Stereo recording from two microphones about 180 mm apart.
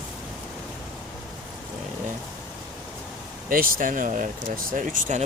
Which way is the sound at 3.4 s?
50° right (ahead or behind).